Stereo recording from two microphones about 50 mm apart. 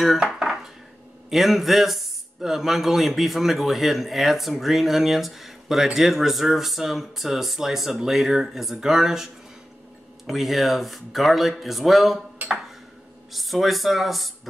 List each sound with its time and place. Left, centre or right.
0.2 s dishes: centre
1.3 s speech: centre
12.4 s dishes: right
13.3 s speech: centre